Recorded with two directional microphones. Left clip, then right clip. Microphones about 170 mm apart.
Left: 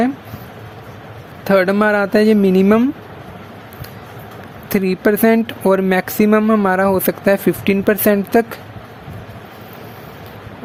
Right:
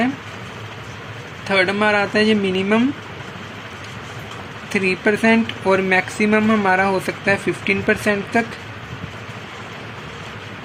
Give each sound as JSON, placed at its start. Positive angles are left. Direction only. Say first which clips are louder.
{"t": 1.5, "sound": "speech", "louder": "left 3 dB", "side_deg": 85}
{"t": 4.7, "sound": "speech", "louder": "left 2 dB", "side_deg": 90}